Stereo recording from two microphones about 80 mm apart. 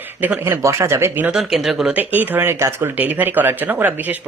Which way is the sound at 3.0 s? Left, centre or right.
Right.